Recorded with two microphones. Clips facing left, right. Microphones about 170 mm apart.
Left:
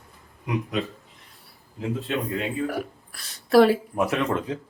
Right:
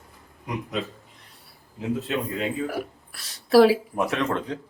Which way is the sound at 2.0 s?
Centre (ahead or behind).